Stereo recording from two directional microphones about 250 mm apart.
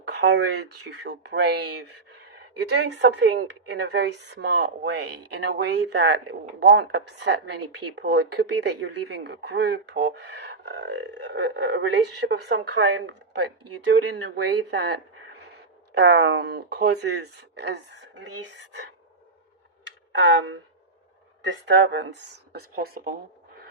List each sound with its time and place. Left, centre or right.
0.1 s speech: right
15.9 s speech: right
20.1 s speech: right